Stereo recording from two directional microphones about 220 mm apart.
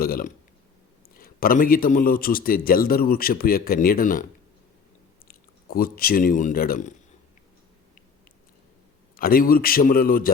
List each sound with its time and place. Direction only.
0.0 s a man's voice: 40° left (ahead or behind)
5.3 s speech: 40° left (ahead or behind)
9.1 s a man's voice: 40° left (ahead or behind)